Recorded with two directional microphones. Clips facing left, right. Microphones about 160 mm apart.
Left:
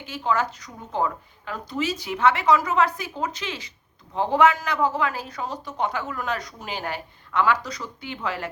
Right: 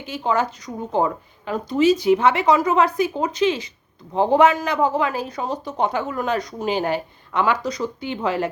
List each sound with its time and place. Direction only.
0.0 s speech: 20° right (ahead or behind)